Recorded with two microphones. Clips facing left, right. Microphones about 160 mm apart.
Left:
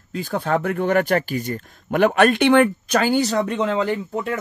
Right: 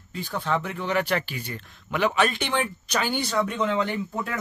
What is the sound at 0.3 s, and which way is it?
Speech, 50° left (ahead or behind).